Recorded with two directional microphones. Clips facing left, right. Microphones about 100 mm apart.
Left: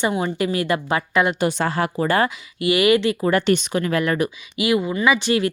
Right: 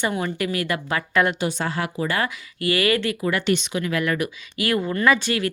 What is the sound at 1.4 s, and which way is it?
Speech, 65° left (ahead or behind).